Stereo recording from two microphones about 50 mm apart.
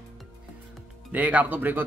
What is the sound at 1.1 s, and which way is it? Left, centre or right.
Speech, right.